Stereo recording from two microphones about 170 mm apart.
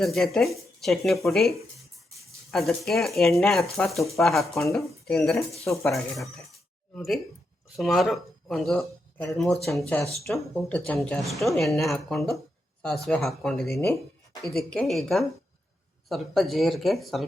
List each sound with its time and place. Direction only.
0.0 s speech: centre (ahead or behind)
5.6 s speech: 15° left (ahead or behind)
5.9 s speech: centre (ahead or behind)